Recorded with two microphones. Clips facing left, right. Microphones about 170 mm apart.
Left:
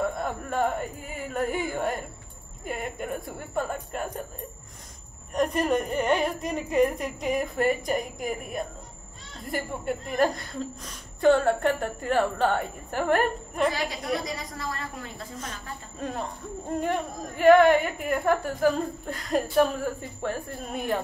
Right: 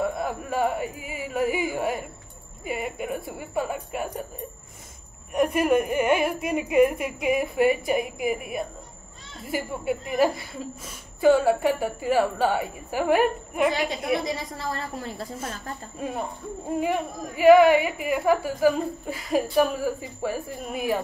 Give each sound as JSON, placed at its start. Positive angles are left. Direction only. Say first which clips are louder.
{"t": 0.0, "sound": "a woman's voice", "louder": "right 2 dB", "side_deg": -5}
{"t": 5.3, "sound": "a woman's voice", "louder": "right 3 dB", "side_deg": -10}
{"t": 14.2, "sound": "a woman's voice", "louder": "right 4 dB", "side_deg": -30}
{"t": 16.0, "sound": "speech", "louder": "right 1 dB", "side_deg": -10}